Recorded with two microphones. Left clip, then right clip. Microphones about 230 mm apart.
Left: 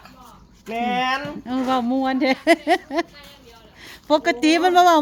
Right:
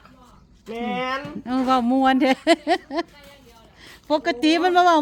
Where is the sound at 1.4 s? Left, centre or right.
Centre.